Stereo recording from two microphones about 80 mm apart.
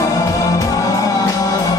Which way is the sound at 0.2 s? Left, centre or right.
Left.